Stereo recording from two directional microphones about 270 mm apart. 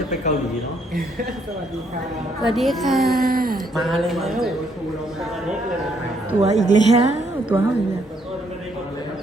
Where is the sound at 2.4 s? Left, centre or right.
Centre.